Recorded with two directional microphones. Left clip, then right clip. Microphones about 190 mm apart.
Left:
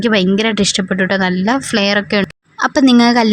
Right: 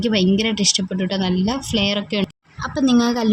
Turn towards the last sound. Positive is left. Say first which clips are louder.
# left 8 dB
turn(degrees=35)  # may be behind; listen again after turning